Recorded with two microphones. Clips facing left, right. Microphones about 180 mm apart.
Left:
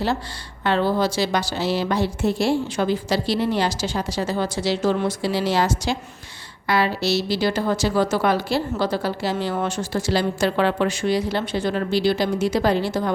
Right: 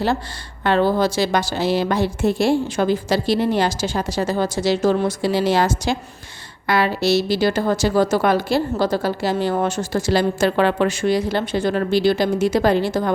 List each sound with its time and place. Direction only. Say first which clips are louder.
0.6 s a woman's voice: right 3 dB; 50° right (ahead or behind)